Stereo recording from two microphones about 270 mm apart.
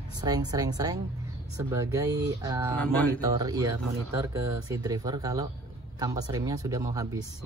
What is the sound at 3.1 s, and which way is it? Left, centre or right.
Speech, centre.